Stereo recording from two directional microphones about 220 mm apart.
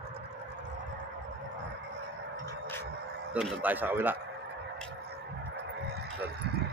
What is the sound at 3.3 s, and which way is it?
Speech, 5° right (ahead or behind).